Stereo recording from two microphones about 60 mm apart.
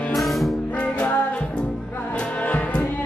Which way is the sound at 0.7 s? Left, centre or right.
Left.